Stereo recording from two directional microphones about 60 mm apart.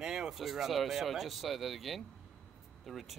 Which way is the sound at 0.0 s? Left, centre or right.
Centre.